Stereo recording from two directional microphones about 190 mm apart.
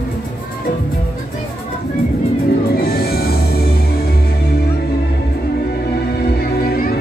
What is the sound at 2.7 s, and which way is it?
Music, 55° left (ahead or behind).